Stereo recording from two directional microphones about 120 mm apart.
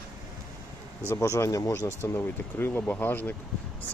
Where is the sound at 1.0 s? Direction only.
25° left (ahead or behind).